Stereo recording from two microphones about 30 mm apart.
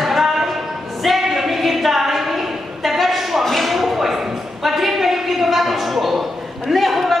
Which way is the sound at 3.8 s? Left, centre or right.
Centre.